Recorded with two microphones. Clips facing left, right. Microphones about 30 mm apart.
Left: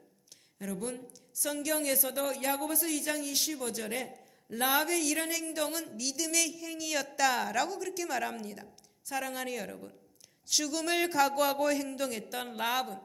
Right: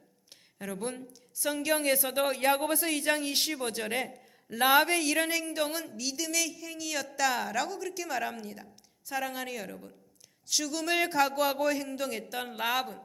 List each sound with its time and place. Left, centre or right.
0.6 s a woman's voice: right
5.6 s speech: centre